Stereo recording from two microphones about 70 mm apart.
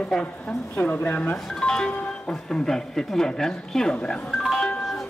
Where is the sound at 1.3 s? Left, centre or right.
Centre.